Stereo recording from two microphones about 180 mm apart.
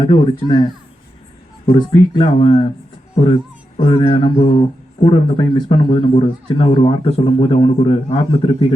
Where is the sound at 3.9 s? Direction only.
30° left (ahead or behind).